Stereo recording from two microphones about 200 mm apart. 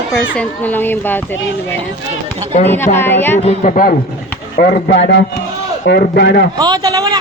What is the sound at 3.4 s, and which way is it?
A man's voice, 35° left (ahead or behind).